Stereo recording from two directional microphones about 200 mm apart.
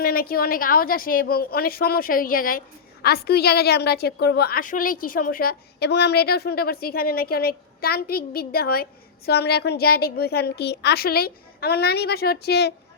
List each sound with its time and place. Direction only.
0.0 s a woman's voice: 50° left (ahead or behind)